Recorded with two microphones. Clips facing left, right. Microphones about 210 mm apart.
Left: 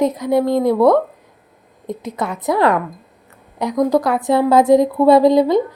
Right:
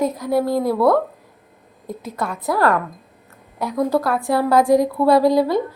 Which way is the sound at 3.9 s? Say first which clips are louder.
Left 3 dB; 15° left (ahead or behind).